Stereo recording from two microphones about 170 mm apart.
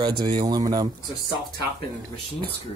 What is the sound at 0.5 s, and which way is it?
Speech, 25° right (ahead or behind).